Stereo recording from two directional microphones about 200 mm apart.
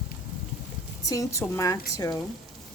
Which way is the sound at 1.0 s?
15° left (ahead or behind).